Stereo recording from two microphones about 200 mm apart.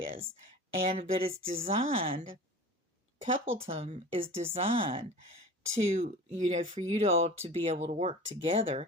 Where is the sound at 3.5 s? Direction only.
30° right (ahead or behind).